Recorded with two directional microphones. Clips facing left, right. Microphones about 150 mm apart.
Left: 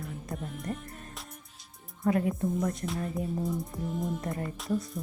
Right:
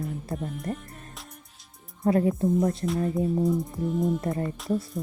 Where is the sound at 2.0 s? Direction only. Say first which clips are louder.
Right 5 dB; 30° right (ahead or behind).